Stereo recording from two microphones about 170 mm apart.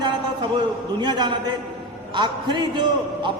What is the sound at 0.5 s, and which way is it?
A man's voice, 25° right (ahead or behind).